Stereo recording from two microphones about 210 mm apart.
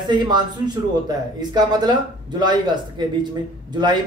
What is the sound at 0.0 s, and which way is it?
Speech, 20° right (ahead or behind).